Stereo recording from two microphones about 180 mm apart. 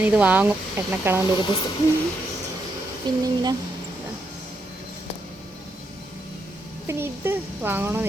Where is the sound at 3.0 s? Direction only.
25° right (ahead or behind).